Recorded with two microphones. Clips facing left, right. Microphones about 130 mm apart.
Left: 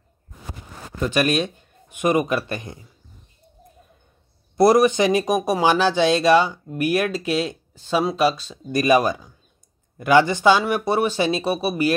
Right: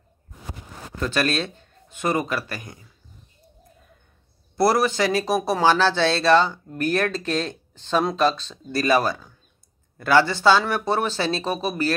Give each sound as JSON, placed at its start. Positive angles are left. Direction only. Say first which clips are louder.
{"t": 0.9, "sound": "speech", "louder": "left 3 dB", "side_deg": 15}
{"t": 4.6, "sound": "speech", "louder": "left 5 dB", "side_deg": 20}